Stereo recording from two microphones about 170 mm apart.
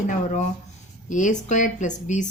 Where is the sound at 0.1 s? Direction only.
45° left (ahead or behind).